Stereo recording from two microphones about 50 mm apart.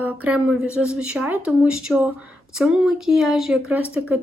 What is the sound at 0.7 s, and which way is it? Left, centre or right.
Speech, right.